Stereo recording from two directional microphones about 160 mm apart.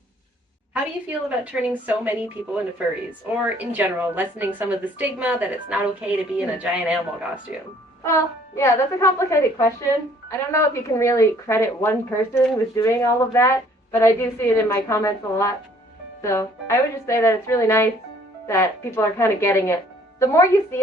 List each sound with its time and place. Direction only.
1.5 s a woman's voice: 10° right (ahead or behind)
8.0 s a woman's voice: 15° left (ahead or behind)